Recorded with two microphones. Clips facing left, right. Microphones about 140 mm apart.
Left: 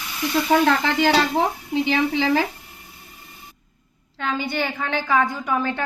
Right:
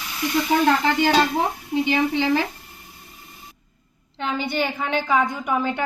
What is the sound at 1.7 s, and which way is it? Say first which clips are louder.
Speech: right 2 dB; 90° left.